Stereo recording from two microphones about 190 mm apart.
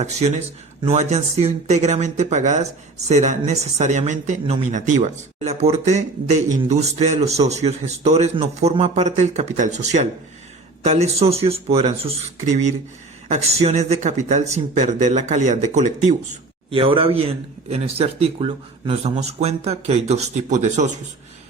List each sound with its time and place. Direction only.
0.0 s speech: 35° right (ahead or behind)
13.2 s speech: 35° right (ahead or behind)
16.7 s speech: 30° right (ahead or behind)